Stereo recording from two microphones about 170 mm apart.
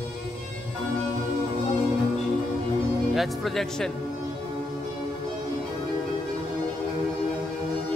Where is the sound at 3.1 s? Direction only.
Centre (ahead or behind).